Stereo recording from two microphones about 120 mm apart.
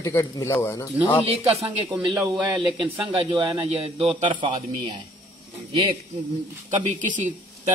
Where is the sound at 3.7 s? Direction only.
55° right (ahead or behind).